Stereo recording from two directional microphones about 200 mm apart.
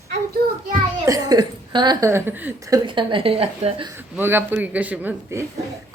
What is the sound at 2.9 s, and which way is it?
A woman's voice, 25° right (ahead or behind).